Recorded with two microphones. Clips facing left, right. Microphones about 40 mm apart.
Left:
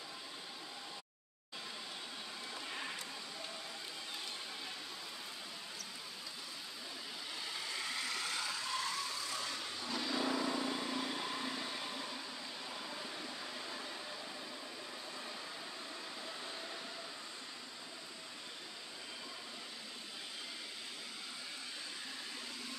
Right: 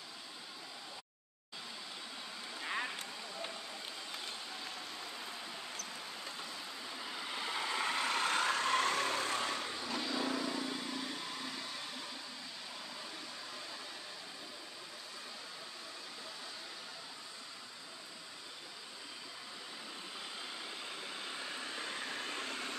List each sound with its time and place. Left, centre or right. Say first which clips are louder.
2.6 s boat: right 8 dB; right
7.2 s vehicle: right 7 dB; right
9.7 s vehicle: right 2 dB; right
9.9 s vehicle: left 1 dB; centre
21.5 s vehicle: right 5 dB; right